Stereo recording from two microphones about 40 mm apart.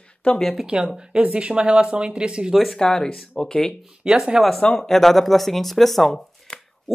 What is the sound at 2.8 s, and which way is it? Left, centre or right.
Speech, centre.